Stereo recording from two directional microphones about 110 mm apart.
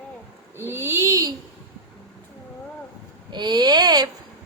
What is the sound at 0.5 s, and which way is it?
Speech, 25° right (ahead or behind).